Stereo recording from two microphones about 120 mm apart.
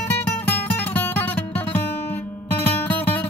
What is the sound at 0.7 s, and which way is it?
Music, 15° left (ahead or behind).